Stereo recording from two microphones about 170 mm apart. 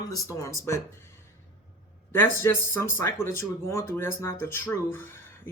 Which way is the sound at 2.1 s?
15° left (ahead or behind).